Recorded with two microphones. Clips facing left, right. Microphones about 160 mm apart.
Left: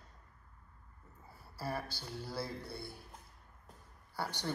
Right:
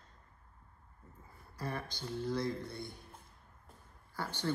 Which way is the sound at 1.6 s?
5° left (ahead or behind).